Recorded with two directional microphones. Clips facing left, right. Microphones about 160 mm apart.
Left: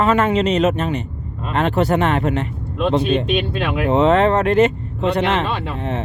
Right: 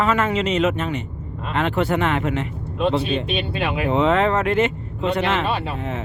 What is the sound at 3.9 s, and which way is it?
Speech, 40° left (ahead or behind).